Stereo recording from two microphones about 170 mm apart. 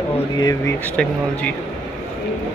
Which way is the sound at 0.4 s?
20° left (ahead or behind).